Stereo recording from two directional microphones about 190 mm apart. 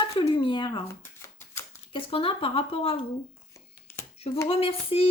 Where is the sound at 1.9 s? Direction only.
30° left (ahead or behind).